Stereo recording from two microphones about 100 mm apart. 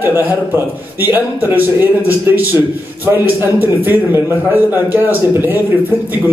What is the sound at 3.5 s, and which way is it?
A man's voice, 20° right (ahead or behind).